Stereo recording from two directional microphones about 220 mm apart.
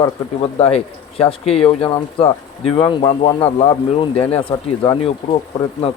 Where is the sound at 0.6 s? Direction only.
25° left (ahead or behind).